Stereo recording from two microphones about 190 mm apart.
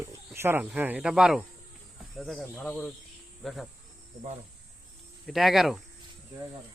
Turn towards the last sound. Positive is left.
turn(degrees=0)  # may be behind; listen again after turning